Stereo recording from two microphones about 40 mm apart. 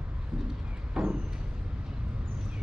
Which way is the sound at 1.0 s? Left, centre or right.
Centre.